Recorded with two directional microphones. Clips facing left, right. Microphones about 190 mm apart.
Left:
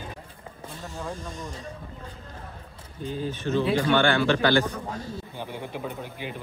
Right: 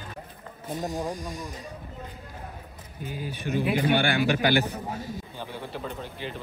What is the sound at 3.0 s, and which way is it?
Speech, 10° right (ahead or behind).